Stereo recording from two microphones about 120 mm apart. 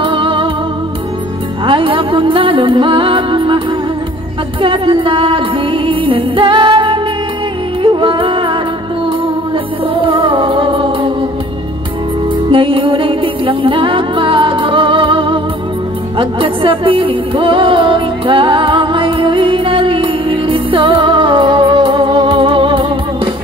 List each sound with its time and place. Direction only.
0.0 s music: 45° right (ahead or behind)
1.7 s music: 45° right (ahead or behind)
10.0 s music: 45° right (ahead or behind)
12.4 s music: 45° right (ahead or behind)